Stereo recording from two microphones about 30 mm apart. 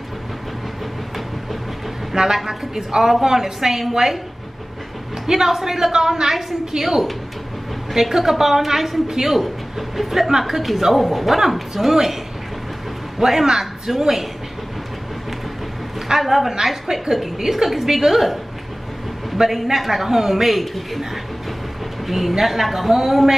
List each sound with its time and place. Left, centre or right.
2.1 s a woman's voice: centre
5.2 s a man's voice: centre
6.8 s a man's voice: centre
13.2 s a man's voice: centre
16.2 s a woman's voice: centre
16.8 s a woman's voice: right
17.5 s a woman's voice: centre
19.4 s a man's voice: centre
22.0 s a woman's voice: centre